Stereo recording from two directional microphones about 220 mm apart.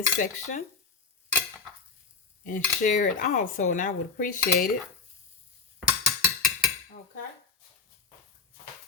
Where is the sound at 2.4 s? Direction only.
35° left (ahead or behind).